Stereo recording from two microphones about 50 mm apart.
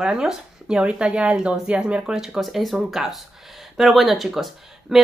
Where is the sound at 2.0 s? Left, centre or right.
Centre.